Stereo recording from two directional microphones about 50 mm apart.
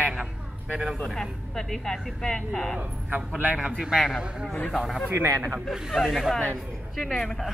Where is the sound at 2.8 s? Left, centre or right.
Right.